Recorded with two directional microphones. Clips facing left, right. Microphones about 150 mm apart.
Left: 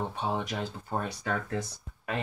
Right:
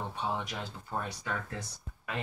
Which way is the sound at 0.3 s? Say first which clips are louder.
Left 4 dB; 40° left (ahead or behind).